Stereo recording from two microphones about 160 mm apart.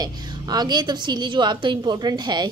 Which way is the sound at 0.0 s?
25° right (ahead or behind).